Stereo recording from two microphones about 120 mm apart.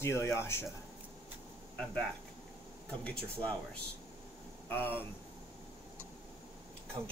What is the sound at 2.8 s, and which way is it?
Speech, 10° left (ahead or behind).